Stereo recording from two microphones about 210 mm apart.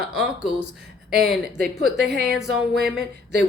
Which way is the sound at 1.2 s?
Centre (ahead or behind).